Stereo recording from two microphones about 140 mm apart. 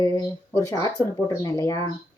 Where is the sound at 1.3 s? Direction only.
25° left (ahead or behind).